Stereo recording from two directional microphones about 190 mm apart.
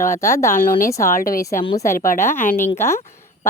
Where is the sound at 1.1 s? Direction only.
45° left (ahead or behind).